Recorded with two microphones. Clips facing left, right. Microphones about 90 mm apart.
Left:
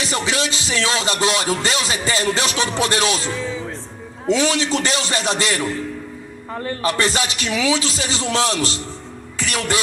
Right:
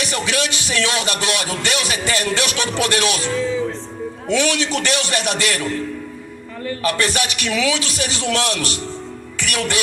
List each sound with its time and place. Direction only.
0.0 s music: 25° left (ahead or behind)
4.3 s music: 25° left (ahead or behind)